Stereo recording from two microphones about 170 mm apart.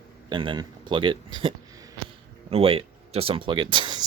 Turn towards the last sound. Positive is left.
turn(degrees=-30)  # may be behind; listen again after turning